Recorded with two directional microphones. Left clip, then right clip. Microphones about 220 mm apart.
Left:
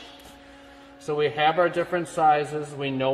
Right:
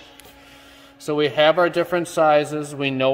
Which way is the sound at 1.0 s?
55° right (ahead or behind).